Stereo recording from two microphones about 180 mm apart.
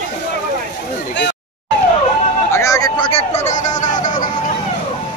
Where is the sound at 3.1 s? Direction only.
35° left (ahead or behind).